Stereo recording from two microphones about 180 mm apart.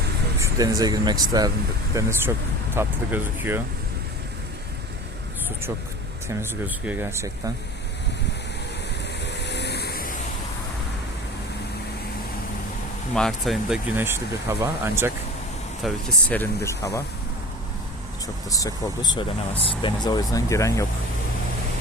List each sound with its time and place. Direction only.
0.3 s speech: 15° right (ahead or behind)
6.2 s speech: 10° right (ahead or behind)
9.2 s vehicle: 70° left (ahead or behind)
13.1 s speech: centre (ahead or behind)
15.8 s speech: 5° left (ahead or behind)
18.4 s speech: 20° left (ahead or behind)